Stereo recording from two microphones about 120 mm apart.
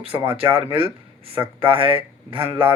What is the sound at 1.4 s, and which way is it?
Speech, 45° right (ahead or behind).